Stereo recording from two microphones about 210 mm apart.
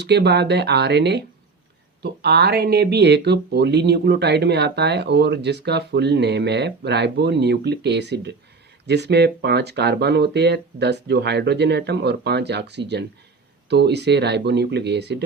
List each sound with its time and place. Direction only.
0.0 s speech: 55° right (ahead or behind)